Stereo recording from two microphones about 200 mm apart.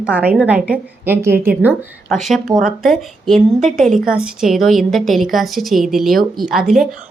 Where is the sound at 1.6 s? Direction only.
Centre (ahead or behind).